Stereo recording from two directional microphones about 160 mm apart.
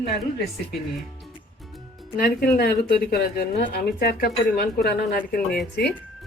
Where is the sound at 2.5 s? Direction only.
80° left; by 5.4 s 65° left (ahead or behind).